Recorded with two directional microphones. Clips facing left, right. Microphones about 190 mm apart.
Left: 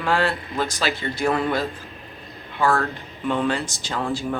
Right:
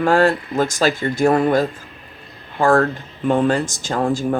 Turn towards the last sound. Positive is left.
turn(degrees=-45)  # may be behind; listen again after turning